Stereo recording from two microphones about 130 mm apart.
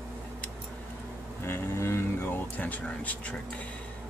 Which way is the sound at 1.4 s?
20° left (ahead or behind).